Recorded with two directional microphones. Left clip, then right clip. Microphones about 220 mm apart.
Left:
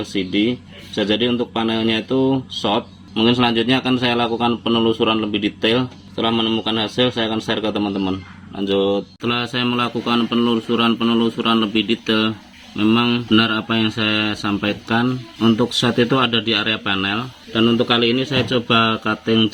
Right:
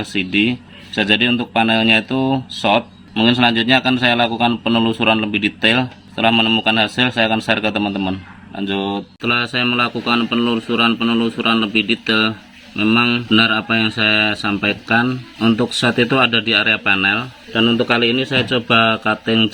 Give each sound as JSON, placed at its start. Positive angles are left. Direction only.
{"t": 0.0, "sound": "speech", "side_deg": -25}
{"t": 9.2, "sound": "mantra", "side_deg": 0}